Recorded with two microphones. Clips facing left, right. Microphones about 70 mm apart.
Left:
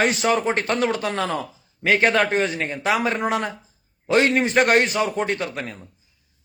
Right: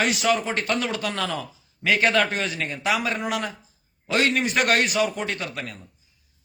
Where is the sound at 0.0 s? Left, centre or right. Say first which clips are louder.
Left 3 dB; left.